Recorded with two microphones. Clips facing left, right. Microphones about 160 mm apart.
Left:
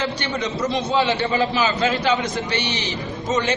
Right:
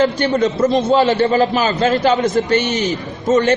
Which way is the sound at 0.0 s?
50° right (ahead or behind).